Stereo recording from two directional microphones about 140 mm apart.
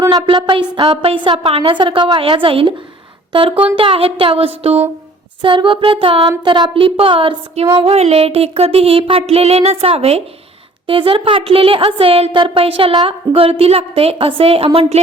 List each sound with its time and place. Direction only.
0.0 s a sound: 25° right (ahead or behind)
0.3 s a woman's voice: 35° right (ahead or behind)
3.8 s music: 40° right (ahead or behind)
5.4 s a woman's voice: 35° right (ahead or behind)
7.8 s music: 45° right (ahead or behind)
10.8 s a woman's voice: 40° right (ahead or behind)